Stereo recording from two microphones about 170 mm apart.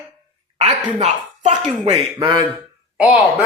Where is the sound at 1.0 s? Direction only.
45° right (ahead or behind).